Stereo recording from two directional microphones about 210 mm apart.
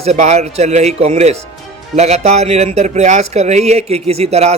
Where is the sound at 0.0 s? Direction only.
35° right (ahead or behind).